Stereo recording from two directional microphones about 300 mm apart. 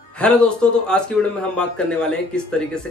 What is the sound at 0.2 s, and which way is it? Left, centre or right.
Speech, centre.